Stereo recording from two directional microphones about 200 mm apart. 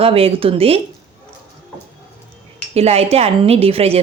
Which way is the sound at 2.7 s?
30° right (ahead or behind).